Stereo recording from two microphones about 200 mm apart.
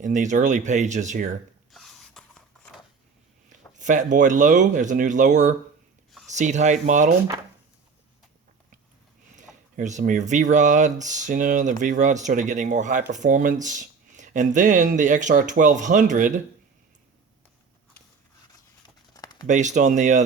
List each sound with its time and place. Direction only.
0.0 s speech: 40° right (ahead or behind)
1.7 s a sound: centre (ahead or behind)
3.8 s speech: 40° right (ahead or behind)
9.3 s speech: 40° right (ahead or behind)
19.1 s a sound: 20° left (ahead or behind)
19.5 s speech: 35° right (ahead or behind)